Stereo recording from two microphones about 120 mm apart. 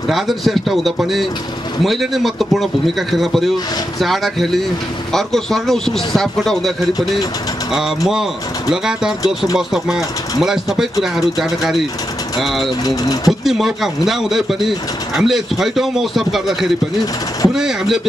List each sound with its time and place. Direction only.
0.1 s a man's voice: centre (ahead or behind)
8.1 s a man's voice: 5° right (ahead or behind)
12.8 s speech: 30° left (ahead or behind)
13.3 s a man's voice: 5° right (ahead or behind)